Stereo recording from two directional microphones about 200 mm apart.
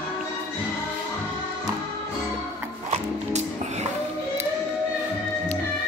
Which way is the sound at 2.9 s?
35° right (ahead or behind).